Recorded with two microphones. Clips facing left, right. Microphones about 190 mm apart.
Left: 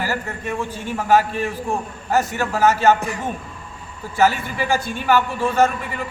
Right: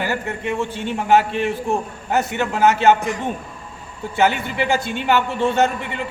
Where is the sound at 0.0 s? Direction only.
20° right (ahead or behind).